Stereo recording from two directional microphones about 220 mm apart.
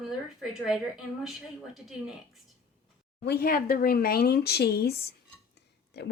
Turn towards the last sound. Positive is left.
turn(degrees=50)  # may be behind; listen again after turning